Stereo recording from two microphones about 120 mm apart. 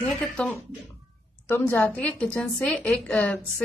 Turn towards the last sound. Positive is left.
turn(degrees=10)  # may be behind; listen again after turning